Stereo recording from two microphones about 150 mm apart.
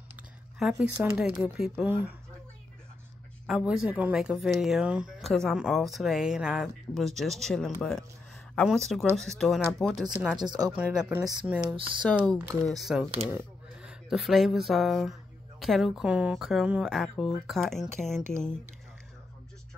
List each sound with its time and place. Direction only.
0.6 s speech: 5° right (ahead or behind)
3.4 s speech: 5° right (ahead or behind)
11.6 s speech: 35° right (ahead or behind)
12.6 s speech: centre (ahead or behind)